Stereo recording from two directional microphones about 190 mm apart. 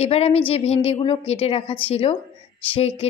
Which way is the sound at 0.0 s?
30° left (ahead or behind).